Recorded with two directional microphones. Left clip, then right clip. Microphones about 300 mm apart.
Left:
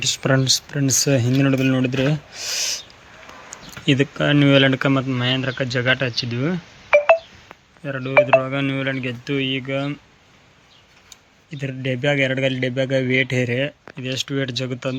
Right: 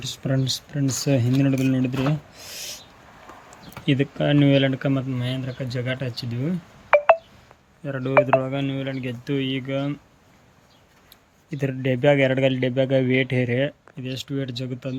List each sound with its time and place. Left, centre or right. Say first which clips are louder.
0.0 s speech: left 8 dB; centre
3.8 s speech: left 4 dB; centre
7.9 s speech: left 3 dB; centre
11.1 s speech: right 2 dB; centre